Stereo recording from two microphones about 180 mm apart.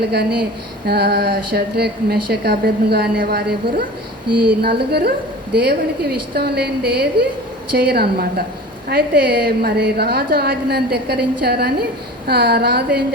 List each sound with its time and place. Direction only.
0.1 s a woman's voice: 60° right (ahead or behind)